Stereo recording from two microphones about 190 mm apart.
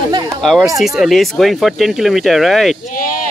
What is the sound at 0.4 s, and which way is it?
Speech, centre (ahead or behind).